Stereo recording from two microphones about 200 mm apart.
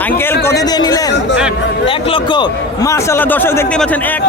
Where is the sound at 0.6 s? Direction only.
20° left (ahead or behind).